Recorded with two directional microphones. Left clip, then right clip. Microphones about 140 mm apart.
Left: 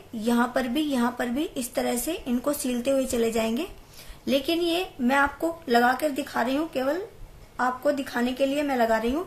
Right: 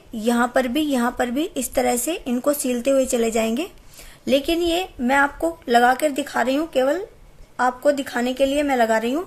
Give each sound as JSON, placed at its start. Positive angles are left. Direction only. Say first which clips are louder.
{"t": 0.2, "sound": "a woman's voice", "louder": "right 6 dB", "side_deg": -50}